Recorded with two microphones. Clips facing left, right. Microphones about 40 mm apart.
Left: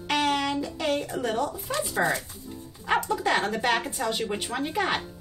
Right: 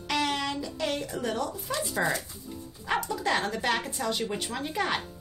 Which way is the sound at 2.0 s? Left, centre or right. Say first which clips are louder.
Left 3 dB; centre.